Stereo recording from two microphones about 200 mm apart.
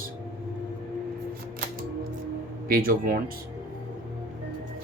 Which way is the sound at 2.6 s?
45° right (ahead or behind).